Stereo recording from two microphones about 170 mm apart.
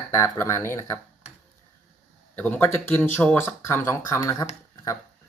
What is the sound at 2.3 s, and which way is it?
Speech, 10° left (ahead or behind).